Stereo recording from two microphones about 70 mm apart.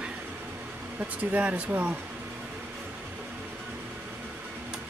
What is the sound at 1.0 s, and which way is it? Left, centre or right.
Speech, right.